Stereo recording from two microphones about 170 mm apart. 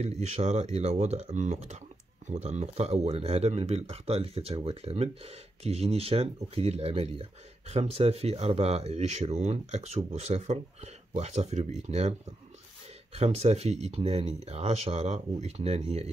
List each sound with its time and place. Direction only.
0.0 s speech: 40° right (ahead or behind)